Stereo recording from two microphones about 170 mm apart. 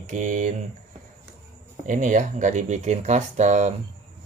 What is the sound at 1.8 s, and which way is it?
Speech, 50° right (ahead or behind).